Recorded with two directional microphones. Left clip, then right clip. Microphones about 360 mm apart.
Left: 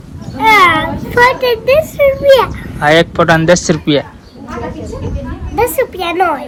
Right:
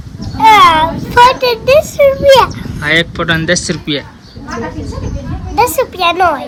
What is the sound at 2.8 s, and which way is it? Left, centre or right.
Speech, left.